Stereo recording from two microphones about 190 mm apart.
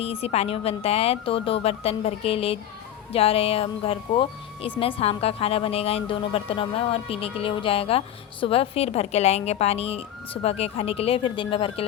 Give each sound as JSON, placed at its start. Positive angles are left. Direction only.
{"t": 0.0, "sound": "a woman's voice", "side_deg": 30}